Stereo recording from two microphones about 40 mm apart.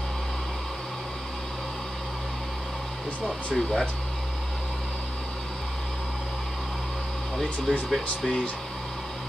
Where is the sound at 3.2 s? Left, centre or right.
Centre.